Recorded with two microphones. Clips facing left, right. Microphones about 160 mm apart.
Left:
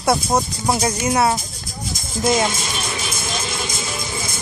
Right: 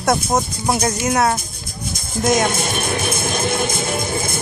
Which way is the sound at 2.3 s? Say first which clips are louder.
Right 3 dB; 55° right (ahead or behind).